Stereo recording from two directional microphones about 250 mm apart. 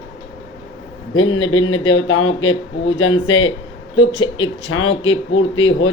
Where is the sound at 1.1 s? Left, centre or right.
Left.